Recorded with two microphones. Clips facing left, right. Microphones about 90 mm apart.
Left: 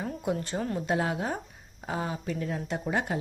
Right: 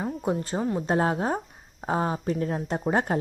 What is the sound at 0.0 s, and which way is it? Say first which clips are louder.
Speech: right 3 dB; 30° right (ahead or behind).